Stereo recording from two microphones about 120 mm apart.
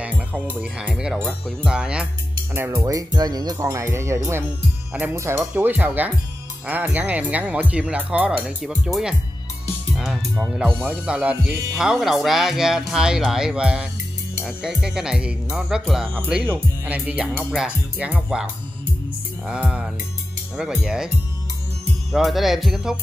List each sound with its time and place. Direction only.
0.0 s music: 10° right (ahead or behind)
0.6 s speech: 10° right (ahead or behind)
1.1 s speech: 5° left (ahead or behind)
1.7 s speech: 5° right (ahead or behind)
2.5 s speech: 20° right (ahead or behind)
2.8 s speech: 30° right (ahead or behind); by 9.1 s 5° right (ahead or behind)
10.8 s speech: 10° right (ahead or behind)
22.1 s speech: centre (ahead or behind)